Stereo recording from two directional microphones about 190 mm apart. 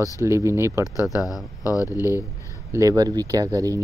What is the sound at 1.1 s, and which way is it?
Speech, 20° left (ahead or behind).